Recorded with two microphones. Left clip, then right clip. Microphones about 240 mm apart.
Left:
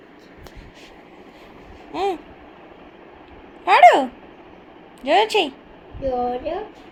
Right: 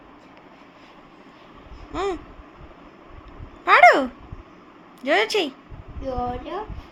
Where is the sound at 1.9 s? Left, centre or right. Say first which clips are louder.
Left 3 dB; right.